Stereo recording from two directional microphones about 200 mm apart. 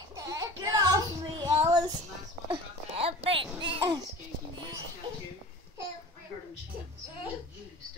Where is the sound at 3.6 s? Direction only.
25° right (ahead or behind).